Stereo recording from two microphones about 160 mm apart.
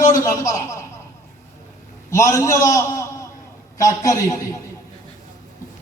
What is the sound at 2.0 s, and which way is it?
A man's voice, 20° left (ahead or behind).